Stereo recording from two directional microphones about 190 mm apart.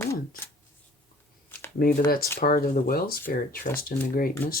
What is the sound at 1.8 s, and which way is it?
Speech, 50° left (ahead or behind).